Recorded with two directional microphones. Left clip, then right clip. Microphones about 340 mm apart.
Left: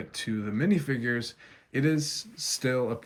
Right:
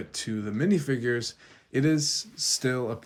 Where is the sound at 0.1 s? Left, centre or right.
Centre.